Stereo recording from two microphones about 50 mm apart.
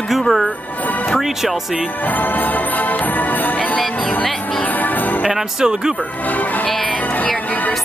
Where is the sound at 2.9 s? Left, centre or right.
Left.